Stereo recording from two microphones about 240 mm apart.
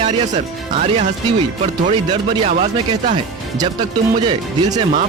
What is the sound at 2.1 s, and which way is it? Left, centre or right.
Speech, right.